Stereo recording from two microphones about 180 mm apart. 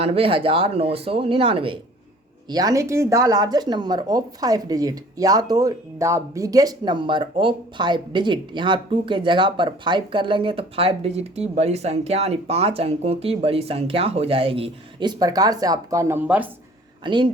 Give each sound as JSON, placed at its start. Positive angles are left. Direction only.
{"t": 0.0, "sound": "speech", "side_deg": -30}
{"t": 17.0, "sound": "speech", "side_deg": -25}